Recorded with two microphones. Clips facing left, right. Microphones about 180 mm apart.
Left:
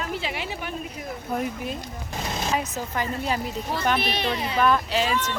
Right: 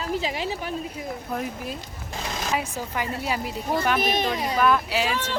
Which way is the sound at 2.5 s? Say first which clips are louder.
Right 1 dB; 10° right (ahead or behind).